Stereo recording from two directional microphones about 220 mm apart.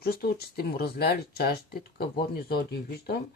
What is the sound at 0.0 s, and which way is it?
Speech, 45° left (ahead or behind).